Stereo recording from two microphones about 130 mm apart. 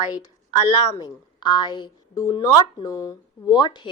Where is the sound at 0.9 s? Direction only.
35° left (ahead or behind).